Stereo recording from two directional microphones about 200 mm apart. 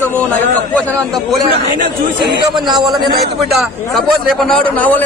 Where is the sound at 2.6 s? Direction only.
20° right (ahead or behind).